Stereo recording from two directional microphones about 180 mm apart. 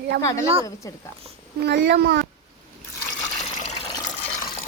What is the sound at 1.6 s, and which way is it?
Speech, 70° right (ahead or behind).